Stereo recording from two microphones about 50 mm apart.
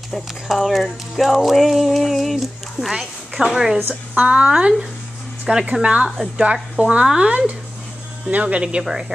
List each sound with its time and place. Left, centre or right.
0.6 s a woman's voice: centre
3.9 s speech: right